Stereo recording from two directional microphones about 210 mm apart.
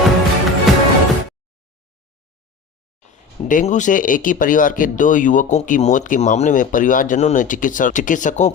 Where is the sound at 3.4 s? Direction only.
40° left (ahead or behind).